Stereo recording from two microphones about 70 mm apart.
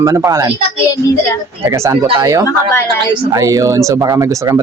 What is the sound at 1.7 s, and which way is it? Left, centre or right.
Speech, right.